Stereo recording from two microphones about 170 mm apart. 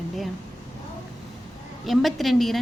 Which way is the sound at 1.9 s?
Centre (ahead or behind).